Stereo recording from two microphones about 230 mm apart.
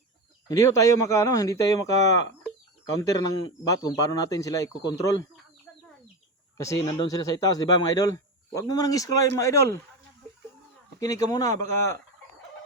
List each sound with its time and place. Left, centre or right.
0.4 s speech: centre
5.7 s chicken: centre
6.6 s speech: centre
11.0 s speech: centre